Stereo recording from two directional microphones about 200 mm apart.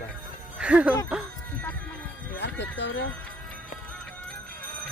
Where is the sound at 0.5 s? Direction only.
5° right (ahead or behind).